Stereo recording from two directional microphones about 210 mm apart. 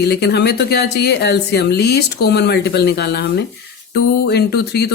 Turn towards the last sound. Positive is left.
turn(degrees=50)  # may be behind; listen again after turning